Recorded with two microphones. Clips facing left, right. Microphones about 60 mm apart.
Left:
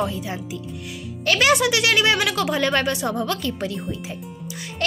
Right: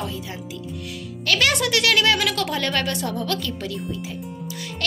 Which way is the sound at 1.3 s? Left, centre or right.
Centre.